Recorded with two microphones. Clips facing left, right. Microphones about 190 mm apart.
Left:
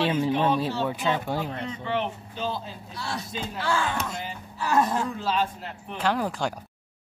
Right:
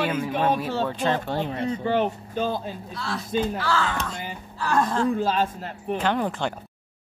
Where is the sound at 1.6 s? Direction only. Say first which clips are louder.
Right 6 dB; 40° right (ahead or behind).